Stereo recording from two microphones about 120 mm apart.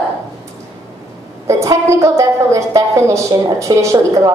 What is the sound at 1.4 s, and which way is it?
A woman's voice, 25° right (ahead or behind).